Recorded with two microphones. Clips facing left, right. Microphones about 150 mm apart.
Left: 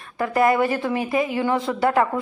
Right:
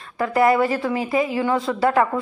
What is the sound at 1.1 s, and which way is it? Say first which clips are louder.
Speech: right 2 dB; 25° right (ahead or behind).